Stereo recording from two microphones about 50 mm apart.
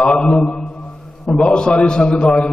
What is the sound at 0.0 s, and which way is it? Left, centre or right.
A man's voice, centre.